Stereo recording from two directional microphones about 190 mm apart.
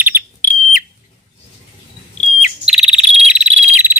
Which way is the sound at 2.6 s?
5° right (ahead or behind).